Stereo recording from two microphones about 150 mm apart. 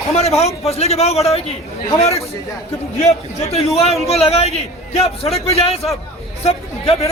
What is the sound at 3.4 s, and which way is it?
A man's voice, 45° left (ahead or behind).